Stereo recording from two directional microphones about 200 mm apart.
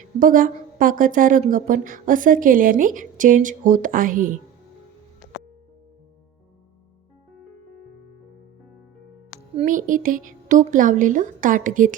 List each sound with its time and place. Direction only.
0.2 s a woman's voice: 45° right (ahead or behind)
9.6 s a woman's voice: 40° right (ahead or behind)